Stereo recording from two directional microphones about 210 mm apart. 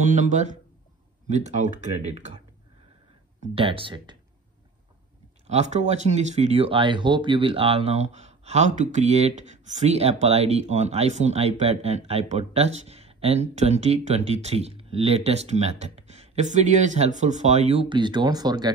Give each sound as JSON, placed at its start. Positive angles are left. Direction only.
{"t": 0.0, "sound": "speech", "side_deg": -35}
{"t": 3.3, "sound": "speech", "side_deg": -25}
{"t": 5.5, "sound": "speech", "side_deg": -30}